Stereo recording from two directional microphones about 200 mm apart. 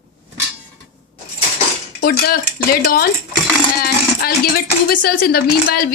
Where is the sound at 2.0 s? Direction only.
50° left (ahead or behind).